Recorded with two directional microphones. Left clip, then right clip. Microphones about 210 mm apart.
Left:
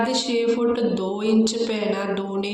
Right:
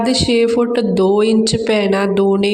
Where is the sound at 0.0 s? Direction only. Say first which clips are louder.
Right 7 dB; 50° right (ahead or behind).